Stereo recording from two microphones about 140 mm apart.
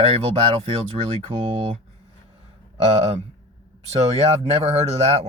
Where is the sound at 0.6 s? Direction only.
40° right (ahead or behind).